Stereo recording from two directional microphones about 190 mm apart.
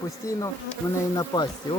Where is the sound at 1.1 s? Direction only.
20° left (ahead or behind).